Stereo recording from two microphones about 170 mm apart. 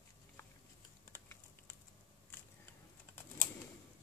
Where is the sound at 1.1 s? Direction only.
15° left (ahead or behind).